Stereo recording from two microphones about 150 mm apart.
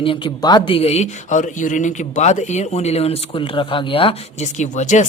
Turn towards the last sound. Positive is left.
turn(degrees=55)  # may be behind; listen again after turning